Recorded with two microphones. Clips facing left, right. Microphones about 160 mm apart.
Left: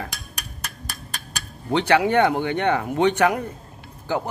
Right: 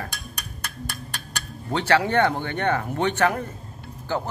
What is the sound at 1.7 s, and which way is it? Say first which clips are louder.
Speech: left 3 dB; 15° left (ahead or behind).